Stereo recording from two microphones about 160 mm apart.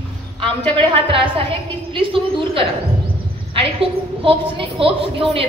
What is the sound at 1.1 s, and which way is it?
A woman's voice, 35° right (ahead or behind).